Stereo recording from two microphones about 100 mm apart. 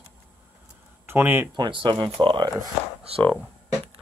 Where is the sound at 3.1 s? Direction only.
85° right.